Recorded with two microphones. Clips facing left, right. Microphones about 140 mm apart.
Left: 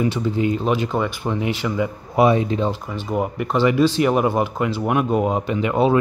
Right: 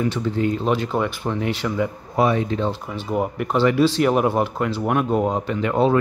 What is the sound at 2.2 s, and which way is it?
Speech, 15° left (ahead or behind).